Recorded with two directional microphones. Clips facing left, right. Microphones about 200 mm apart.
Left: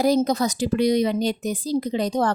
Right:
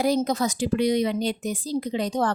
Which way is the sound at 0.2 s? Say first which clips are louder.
Left 3 dB; 35° left (ahead or behind).